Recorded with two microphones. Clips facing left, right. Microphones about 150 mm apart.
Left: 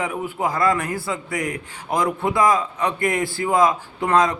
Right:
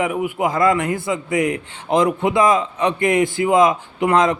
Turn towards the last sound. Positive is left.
turn(degrees=-20)  # may be behind; listen again after turning